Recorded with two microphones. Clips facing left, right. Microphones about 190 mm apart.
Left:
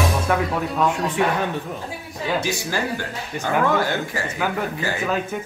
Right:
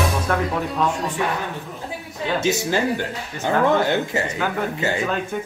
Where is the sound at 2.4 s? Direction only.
20° right (ahead or behind).